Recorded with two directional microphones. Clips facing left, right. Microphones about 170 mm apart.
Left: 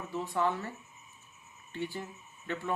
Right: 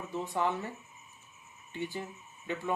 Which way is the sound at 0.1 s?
15° right (ahead or behind).